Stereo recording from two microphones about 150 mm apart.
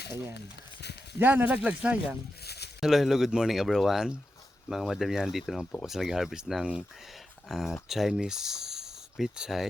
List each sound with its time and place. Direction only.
0.3 s speech: 90° left
1.2 s speech: 10° right (ahead or behind)
2.4 s a sound: 90° left
2.8 s speech: centre (ahead or behind)